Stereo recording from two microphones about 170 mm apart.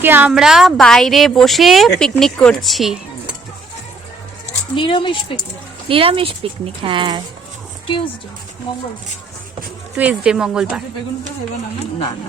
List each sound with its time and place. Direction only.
0.0 s a woman's voice: 10° right (ahead or behind)
4.7 s speech: 30° left (ahead or behind)
5.9 s speech: 35° right (ahead or behind)
9.9 s a woman's voice: 5° right (ahead or behind)